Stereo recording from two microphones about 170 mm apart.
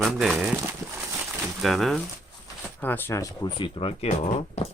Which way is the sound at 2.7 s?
10° left (ahead or behind).